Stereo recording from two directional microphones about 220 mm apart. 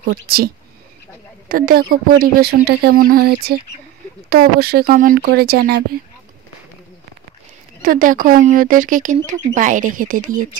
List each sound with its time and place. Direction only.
0.0 s speech: 45° right (ahead or behind)
1.5 s speech: 40° right (ahead or behind)
7.8 s speech: 40° right (ahead or behind)